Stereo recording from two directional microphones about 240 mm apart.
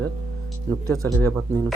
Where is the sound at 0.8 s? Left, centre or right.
Centre.